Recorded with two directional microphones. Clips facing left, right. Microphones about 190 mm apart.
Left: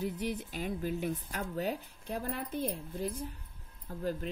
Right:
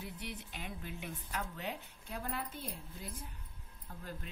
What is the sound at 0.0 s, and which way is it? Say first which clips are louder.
A woman's voice: left 11 dB; 40° left (ahead or behind).